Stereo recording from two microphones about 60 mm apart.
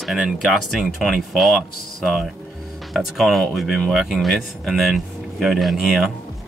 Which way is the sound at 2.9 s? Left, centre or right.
Centre.